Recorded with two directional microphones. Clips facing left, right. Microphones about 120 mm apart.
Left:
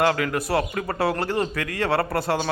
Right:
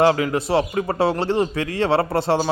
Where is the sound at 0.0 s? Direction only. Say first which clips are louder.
Right 4 dB; 25° right (ahead or behind).